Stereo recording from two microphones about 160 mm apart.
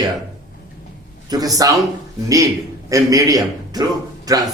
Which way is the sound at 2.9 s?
20° right (ahead or behind).